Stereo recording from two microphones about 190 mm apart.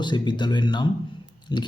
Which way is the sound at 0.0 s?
25° left (ahead or behind).